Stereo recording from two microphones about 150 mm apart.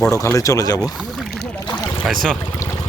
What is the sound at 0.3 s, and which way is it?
Speech, 20° left (ahead or behind).